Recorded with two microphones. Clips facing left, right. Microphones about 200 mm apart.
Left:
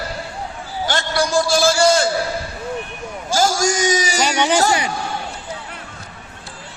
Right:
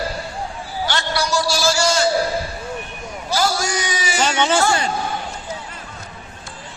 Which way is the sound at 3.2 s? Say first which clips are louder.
Left 3 dB; 45° left (ahead or behind).